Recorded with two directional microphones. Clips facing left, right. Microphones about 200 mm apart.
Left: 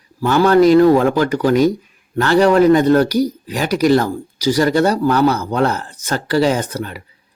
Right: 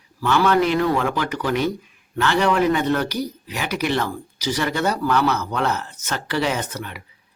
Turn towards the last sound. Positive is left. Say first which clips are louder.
# left 6 dB
turn(degrees=35)  # may be behind; listen again after turning